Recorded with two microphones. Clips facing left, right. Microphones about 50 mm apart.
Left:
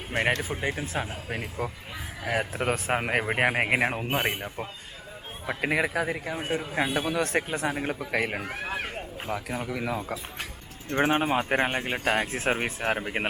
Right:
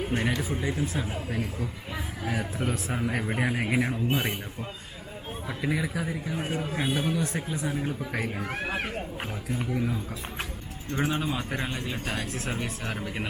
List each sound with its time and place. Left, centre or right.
0.1 s speech: left
5.5 s speech: left
8.1 s speech: left
10.9 s speech: left